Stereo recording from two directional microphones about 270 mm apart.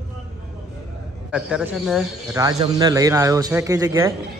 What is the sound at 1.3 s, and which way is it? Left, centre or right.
Speech, centre.